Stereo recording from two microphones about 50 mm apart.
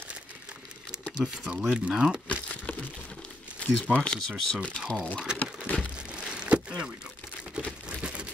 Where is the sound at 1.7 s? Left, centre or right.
Centre.